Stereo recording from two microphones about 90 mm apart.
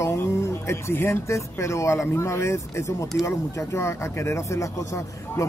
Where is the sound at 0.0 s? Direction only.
30° left (ahead or behind).